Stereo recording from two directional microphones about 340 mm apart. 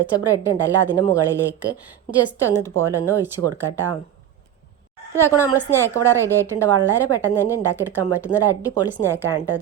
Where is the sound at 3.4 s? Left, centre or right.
Right.